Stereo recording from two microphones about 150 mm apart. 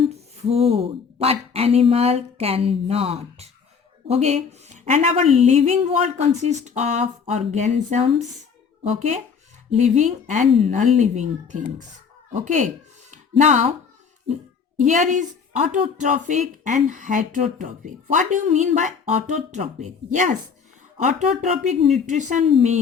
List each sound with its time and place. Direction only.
0.1 s speech: 40° right (ahead or behind)
14.8 s a woman's voice: 55° right (ahead or behind)